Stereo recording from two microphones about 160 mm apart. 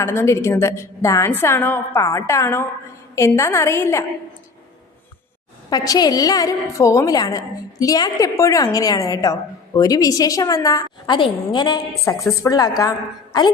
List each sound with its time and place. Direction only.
0.0 s a woman's voice: 15° left (ahead or behind)
5.7 s a woman's voice: 25° left (ahead or behind)